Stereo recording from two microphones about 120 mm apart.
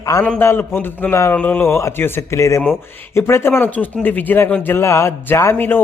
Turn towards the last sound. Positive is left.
turn(degrees=15)  # may be behind; listen again after turning